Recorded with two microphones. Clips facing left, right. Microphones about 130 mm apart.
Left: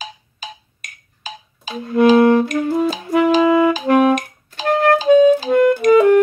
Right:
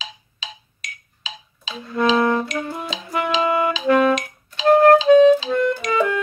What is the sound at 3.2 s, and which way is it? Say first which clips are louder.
Music: left 7 dB; 45° left (ahead or behind).